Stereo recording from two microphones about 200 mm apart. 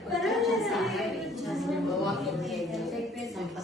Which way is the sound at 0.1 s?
Centre (ahead or behind).